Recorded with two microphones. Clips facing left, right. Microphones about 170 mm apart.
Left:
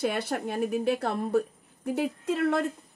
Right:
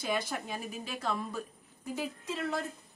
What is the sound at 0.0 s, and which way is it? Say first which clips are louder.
A woman's voice: left 6 dB; 65° left (ahead or behind).